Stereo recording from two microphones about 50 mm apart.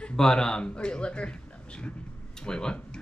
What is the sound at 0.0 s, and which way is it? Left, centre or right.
A man's voice, centre.